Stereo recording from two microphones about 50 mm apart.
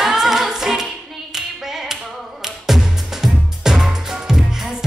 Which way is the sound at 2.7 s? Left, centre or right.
Centre.